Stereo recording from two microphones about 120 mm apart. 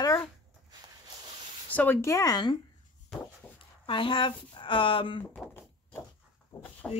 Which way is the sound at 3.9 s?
45° left (ahead or behind).